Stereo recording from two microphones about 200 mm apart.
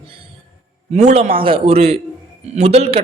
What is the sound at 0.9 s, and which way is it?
Speech, 35° right (ahead or behind).